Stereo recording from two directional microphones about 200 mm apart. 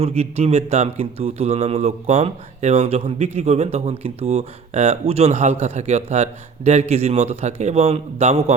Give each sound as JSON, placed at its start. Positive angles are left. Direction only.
{"t": 0.2, "sound": "speech", "side_deg": -30}